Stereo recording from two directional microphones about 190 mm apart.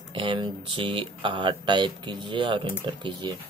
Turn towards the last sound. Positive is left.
turn(degrees=-25)  # may be behind; listen again after turning